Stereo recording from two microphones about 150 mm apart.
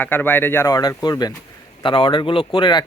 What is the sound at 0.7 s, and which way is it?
Speech, 25° left (ahead or behind).